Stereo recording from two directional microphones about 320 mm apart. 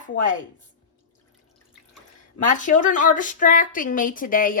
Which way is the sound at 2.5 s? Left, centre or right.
Left.